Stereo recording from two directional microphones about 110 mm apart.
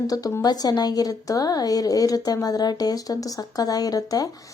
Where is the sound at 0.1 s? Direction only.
30° left (ahead or behind).